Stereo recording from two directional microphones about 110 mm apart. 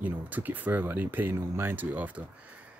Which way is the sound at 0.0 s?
15° right (ahead or behind).